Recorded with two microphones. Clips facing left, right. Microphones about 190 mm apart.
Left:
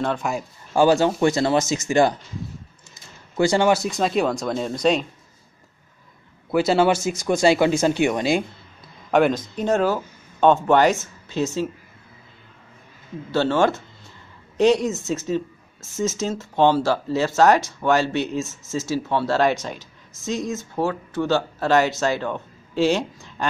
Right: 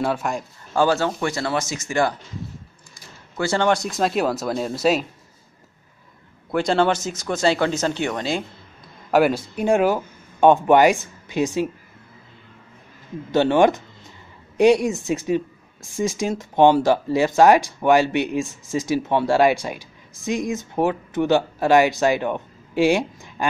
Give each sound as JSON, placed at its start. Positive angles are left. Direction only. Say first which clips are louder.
{"t": 0.0, "sound": "speech", "louder": "right 1 dB", "side_deg": -5}
{"t": 0.7, "sound": "speech", "louder": "left 3 dB", "side_deg": 15}
{"t": 3.3, "sound": "speech", "louder": "left 2 dB", "side_deg": 15}
{"t": 6.5, "sound": "speech", "louder": "left 1 dB", "side_deg": 5}
{"t": 9.1, "sound": "speech", "louder": "right 1 dB", "side_deg": -5}
{"t": 13.3, "sound": "speech", "louder": "right 3 dB", "side_deg": -15}